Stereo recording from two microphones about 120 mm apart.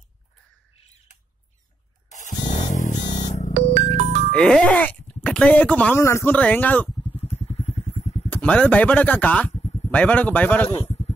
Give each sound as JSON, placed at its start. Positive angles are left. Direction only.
{"t": 2.0, "sound": "a sound", "side_deg": 85}
{"t": 3.1, "sound": "music", "side_deg": 80}
{"t": 3.5, "sound": "music", "side_deg": -80}
{"t": 4.3, "sound": "speech", "side_deg": 10}
{"t": 5.9, "sound": "speech", "side_deg": 20}
{"t": 7.6, "sound": "vehicle", "side_deg": 60}
{"t": 8.3, "sound": "speech", "side_deg": 10}